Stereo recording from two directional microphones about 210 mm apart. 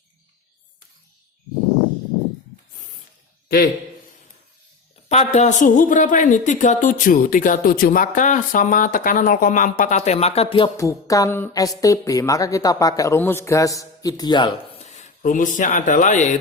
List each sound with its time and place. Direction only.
5.0 s speech: 30° left (ahead or behind)
14.8 s speech: 35° left (ahead or behind)